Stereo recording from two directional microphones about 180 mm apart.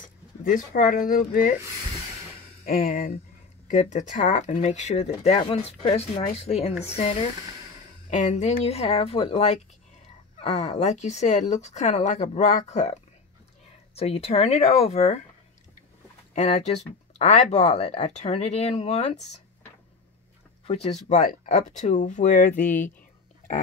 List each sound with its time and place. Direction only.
0.4 s speech: 50° left (ahead or behind)
2.6 s speech: 50° left (ahead or behind); by 15.2 s 35° left (ahead or behind)
16.3 s speech: 40° left (ahead or behind)
20.6 s speech: 35° left (ahead or behind)
21.1 s speech: 45° left (ahead or behind)
22.7 s speech: 10° left (ahead or behind)